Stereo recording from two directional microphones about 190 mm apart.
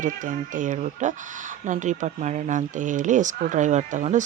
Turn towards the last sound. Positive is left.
turn(degrees=-40)  # may be behind; listen again after turning